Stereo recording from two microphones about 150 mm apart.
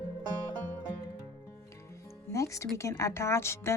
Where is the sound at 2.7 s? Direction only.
20° left (ahead or behind).